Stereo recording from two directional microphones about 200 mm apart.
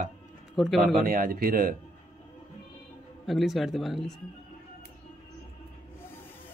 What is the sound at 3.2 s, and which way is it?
Speech, centre (ahead or behind).